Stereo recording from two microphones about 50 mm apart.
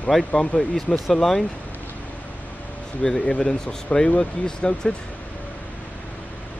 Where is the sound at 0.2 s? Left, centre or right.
Left.